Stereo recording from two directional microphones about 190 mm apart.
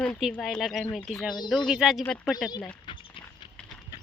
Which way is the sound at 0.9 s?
Centre (ahead or behind).